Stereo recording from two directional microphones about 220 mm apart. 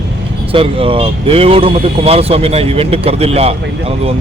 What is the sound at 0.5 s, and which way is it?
Speech, 25° right (ahead or behind).